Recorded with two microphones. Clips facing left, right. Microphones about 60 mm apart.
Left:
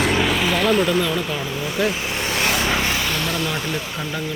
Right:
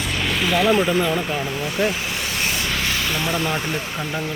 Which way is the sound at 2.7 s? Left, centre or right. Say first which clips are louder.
Left 2 dB; centre.